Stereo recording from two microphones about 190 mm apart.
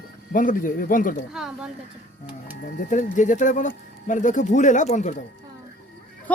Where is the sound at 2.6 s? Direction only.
45° left (ahead or behind).